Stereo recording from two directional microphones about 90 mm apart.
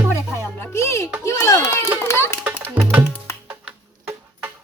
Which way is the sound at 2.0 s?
30° left (ahead or behind).